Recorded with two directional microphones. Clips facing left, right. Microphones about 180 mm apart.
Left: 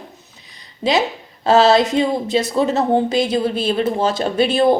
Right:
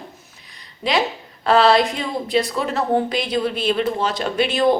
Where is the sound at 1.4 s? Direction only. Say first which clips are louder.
Left 2 dB; 25° left (ahead or behind).